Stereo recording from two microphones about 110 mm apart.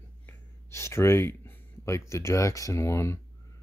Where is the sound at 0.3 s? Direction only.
25° left (ahead or behind).